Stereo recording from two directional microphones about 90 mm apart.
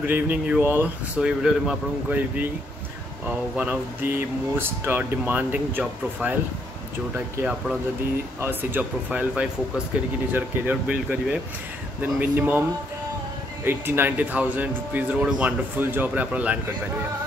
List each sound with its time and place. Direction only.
0.0 s speech: 15° right (ahead or behind)
1.1 s speech: 10° right (ahead or behind)
3.3 s speech: 15° right (ahead or behind)
13.7 s speech: 25° right (ahead or behind)